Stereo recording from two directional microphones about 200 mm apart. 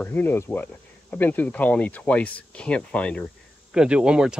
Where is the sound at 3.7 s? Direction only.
5° right (ahead or behind).